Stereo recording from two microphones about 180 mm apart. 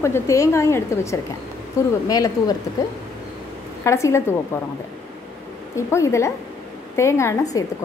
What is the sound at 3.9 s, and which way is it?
Speech, 15° left (ahead or behind).